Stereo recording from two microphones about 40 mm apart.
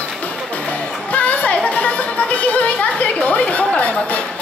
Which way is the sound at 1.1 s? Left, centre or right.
Left.